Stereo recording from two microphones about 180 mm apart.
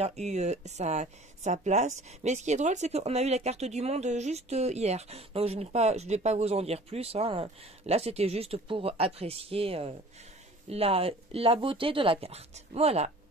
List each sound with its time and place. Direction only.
0.0 s speech: 40° right (ahead or behind)